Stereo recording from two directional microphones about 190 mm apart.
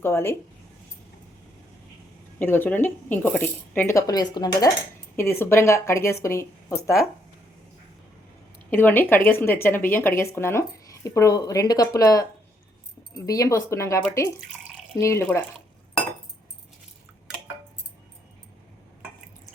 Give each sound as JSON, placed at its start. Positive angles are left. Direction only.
{"t": 0.0, "sound": "speech", "side_deg": 10}
{"t": 2.4, "sound": "speech", "side_deg": 10}
{"t": 8.7, "sound": "speech", "side_deg": 10}
{"t": 13.1, "sound": "speech", "side_deg": 20}